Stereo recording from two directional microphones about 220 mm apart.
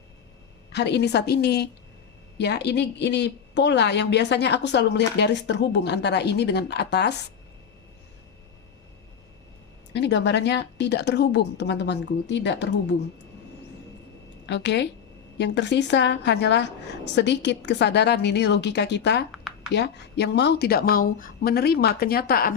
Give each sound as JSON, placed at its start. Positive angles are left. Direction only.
{"t": 0.7, "sound": "speech", "side_deg": 50}
{"t": 9.9, "sound": "speech", "side_deg": 50}
{"t": 14.4, "sound": "a woman's voice", "side_deg": 55}